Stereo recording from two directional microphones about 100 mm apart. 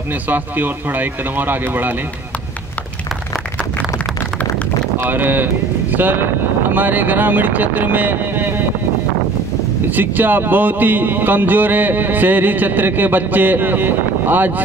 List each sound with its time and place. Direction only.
0.3 s speech: 20° right (ahead or behind)
4.9 s speech: 20° right (ahead or behind)
9.8 s speech: 20° right (ahead or behind)